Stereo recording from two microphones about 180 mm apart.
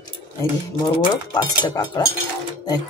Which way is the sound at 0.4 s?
20° left (ahead or behind).